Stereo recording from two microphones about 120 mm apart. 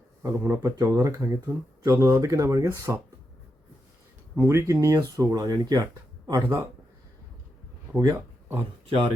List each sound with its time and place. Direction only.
0.2 s speech: 20° right (ahead or behind)
4.4 s speech: 20° right (ahead or behind)
7.9 s speech: 30° right (ahead or behind)